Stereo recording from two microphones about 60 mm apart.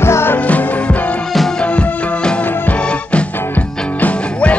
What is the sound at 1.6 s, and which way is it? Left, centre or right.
Music, centre.